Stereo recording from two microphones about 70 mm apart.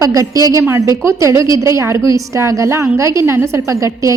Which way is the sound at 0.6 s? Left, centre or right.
Right.